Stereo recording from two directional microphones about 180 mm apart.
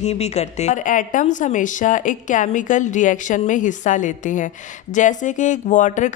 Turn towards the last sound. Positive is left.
turn(degrees=45)  # may be behind; listen again after turning